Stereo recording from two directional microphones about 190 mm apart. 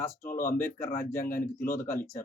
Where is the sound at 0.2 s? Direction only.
45° left (ahead or behind).